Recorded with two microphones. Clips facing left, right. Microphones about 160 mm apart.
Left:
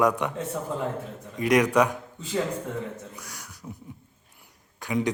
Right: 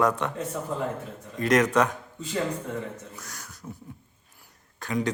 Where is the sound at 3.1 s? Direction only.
10° left (ahead or behind).